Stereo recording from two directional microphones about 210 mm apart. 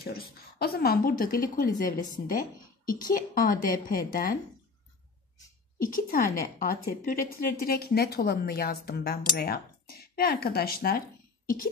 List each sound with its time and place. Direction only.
0.0 s a woman's voice: 45° left (ahead or behind)
5.8 s a woman's voice: 40° left (ahead or behind)